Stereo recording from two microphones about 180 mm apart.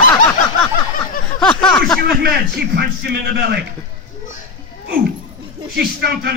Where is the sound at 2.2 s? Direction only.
60° right (ahead or behind).